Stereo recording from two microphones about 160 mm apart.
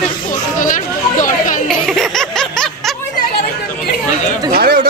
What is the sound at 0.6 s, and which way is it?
Chatter, 55° left (ahead or behind).